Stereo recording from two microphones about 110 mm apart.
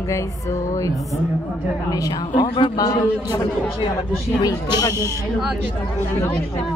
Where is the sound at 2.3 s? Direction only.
50° left (ahead or behind).